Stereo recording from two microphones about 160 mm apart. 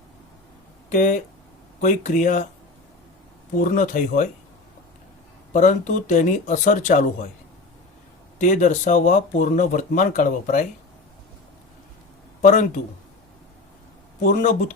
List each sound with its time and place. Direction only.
0.9 s speech: 50° left (ahead or behind)
3.5 s speech: 55° left (ahead or behind)
5.5 s speech: 50° left (ahead or behind)
8.4 s speech: 50° left (ahead or behind)
12.4 s speech: 50° left (ahead or behind)
14.2 s speech: 50° left (ahead or behind)